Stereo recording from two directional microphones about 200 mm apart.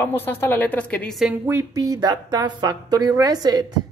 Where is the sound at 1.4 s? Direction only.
15° right (ahead or behind).